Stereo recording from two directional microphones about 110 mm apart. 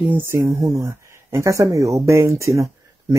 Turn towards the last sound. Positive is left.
turn(degrees=-30)  # may be behind; listen again after turning